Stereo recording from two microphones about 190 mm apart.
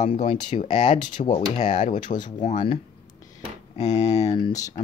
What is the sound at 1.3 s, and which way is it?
Speech, 40° left (ahead or behind).